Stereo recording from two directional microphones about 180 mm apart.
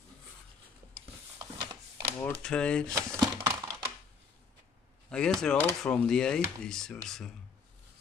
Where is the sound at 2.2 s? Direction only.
10° left (ahead or behind).